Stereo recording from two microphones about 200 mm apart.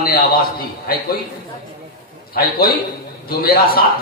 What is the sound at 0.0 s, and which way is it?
Speech, 45° left (ahead or behind).